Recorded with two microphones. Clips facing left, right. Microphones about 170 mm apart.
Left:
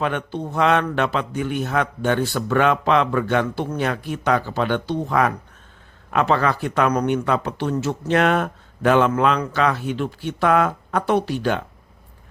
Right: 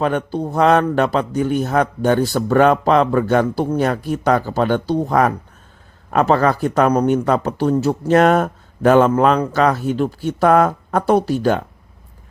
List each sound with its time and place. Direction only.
0.0 s speech: 40° right (ahead or behind)